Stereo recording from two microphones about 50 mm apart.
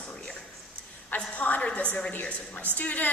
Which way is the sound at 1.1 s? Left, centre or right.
Left.